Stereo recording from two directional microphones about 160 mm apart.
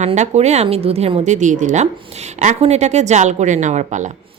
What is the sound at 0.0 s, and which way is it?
A woman's voice, 45° right (ahead or behind).